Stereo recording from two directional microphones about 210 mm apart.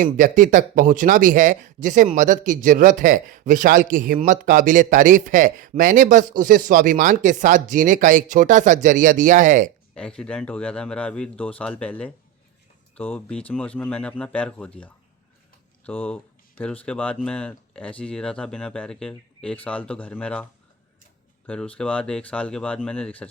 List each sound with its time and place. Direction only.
0.0 s a man's voice: 40° right (ahead or behind)
9.9 s speech: 5° left (ahead or behind)